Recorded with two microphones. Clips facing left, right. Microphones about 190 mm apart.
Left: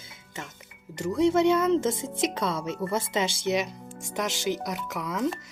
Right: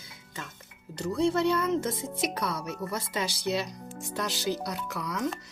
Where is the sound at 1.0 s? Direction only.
20° left (ahead or behind).